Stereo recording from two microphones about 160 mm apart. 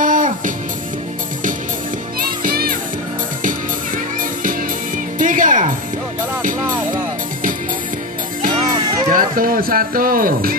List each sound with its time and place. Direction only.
0.0 s music: 55° right (ahead or behind)
2.4 s children playing: 70° right (ahead or behind)
3.4 s music: 55° right (ahead or behind)
9.1 s speech: 65° right (ahead or behind)